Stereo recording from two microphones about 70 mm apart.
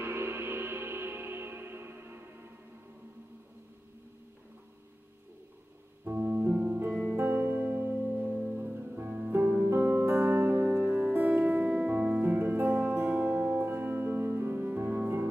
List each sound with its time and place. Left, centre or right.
0.0 s music: right
6.0 s piano: right
7.2 s music: right
10.7 s music: centre
11.0 s music: right